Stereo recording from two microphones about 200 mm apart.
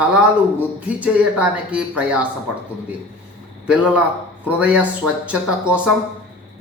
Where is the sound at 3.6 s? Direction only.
5° right (ahead or behind).